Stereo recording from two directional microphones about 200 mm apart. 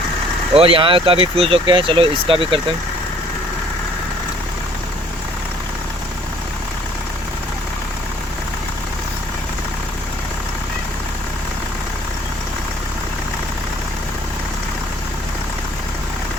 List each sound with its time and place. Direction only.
0.5 s speech: 30° right (ahead or behind)